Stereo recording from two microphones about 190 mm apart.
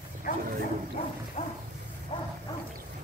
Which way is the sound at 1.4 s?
30° left (ahead or behind).